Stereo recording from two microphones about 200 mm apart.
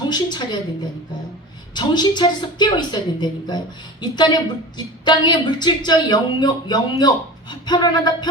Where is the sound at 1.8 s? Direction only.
20° left (ahead or behind).